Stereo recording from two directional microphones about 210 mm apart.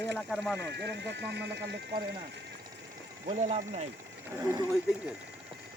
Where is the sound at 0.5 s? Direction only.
55° right (ahead or behind).